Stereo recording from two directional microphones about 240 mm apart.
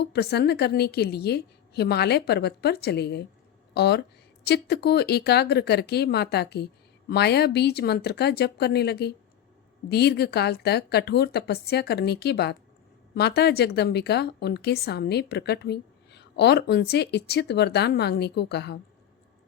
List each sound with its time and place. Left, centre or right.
0.1 s a woman's voice: left